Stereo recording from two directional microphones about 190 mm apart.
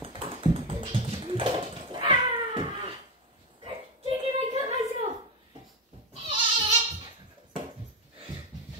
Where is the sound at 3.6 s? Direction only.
30° right (ahead or behind).